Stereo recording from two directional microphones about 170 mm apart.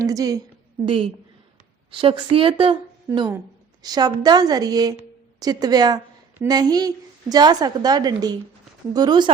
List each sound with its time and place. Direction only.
0.0 s a woman's voice: 20° right (ahead or behind)
0.9 s speech: 35° right (ahead or behind)
3.8 s a woman's voice: 20° right (ahead or behind)